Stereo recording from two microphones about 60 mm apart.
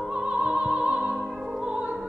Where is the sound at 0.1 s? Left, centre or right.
Right.